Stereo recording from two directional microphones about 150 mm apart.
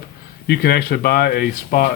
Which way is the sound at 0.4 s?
90° left.